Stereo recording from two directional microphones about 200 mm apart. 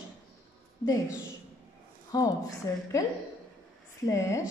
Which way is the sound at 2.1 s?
20° left (ahead or behind).